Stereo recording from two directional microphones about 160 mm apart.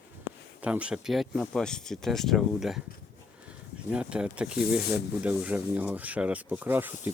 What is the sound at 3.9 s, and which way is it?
Speech, 5° right (ahead or behind).